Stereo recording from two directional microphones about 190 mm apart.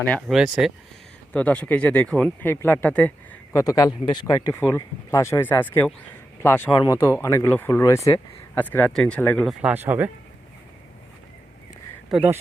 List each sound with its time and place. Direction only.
0.0 s speech: 5° left (ahead or behind)
1.3 s speech: 5° left (ahead or behind)
3.5 s speech: 20° left (ahead or behind)
9.6 s speech: 10° right (ahead or behind)
12.1 s speech: 10° right (ahead or behind)